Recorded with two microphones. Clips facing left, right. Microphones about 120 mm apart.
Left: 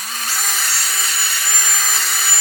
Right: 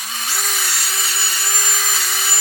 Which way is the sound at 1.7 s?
Centre (ahead or behind).